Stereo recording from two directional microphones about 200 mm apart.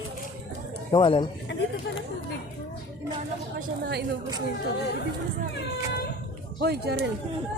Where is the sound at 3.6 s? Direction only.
55° right (ahead or behind).